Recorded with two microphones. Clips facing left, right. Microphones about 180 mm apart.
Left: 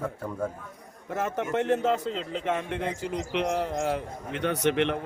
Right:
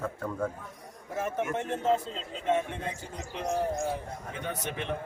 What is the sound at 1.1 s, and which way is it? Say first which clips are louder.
A man's voice: left 3 dB; 75° left (ahead or behind).